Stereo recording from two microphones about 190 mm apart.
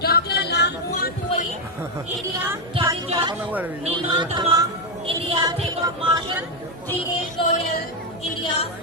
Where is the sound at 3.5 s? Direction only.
10° right (ahead or behind).